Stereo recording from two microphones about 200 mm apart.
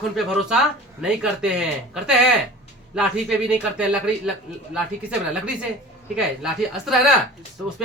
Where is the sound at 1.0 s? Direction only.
5° right (ahead or behind).